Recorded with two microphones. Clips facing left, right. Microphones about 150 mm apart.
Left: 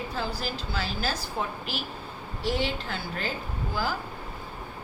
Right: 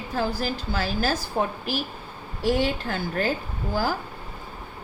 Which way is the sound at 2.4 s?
50° right (ahead or behind).